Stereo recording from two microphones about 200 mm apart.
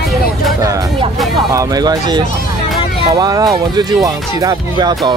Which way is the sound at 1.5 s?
20° right (ahead or behind).